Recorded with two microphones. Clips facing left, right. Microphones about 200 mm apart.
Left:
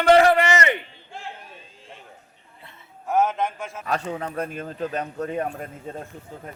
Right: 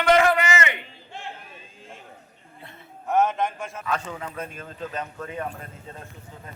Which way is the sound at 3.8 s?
40° left (ahead or behind).